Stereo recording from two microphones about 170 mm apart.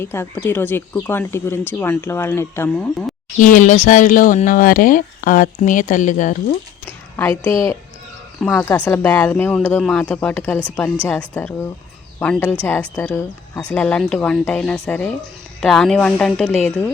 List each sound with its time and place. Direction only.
0.0 s speech: 15° left (ahead or behind)
3.4 s speech: 50° left (ahead or behind)
7.2 s speech: 10° left (ahead or behind)